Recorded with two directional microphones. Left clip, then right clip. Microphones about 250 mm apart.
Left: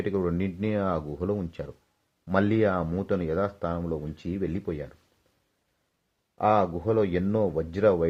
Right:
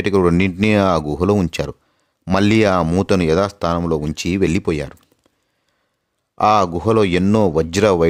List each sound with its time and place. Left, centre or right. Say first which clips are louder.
0.0 s speech: right 13 dB; right
6.3 s speech: right 9 dB; right